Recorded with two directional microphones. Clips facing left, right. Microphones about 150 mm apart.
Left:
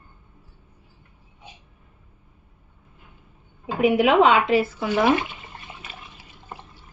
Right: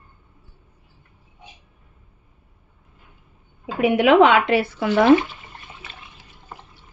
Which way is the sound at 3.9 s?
80° right.